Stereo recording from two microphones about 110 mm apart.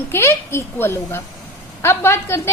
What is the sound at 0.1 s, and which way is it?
A woman's voice, 25° left (ahead or behind).